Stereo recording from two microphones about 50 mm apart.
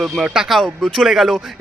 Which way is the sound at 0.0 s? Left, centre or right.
Centre.